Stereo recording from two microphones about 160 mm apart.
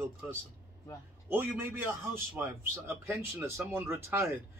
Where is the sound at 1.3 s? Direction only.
15° right (ahead or behind).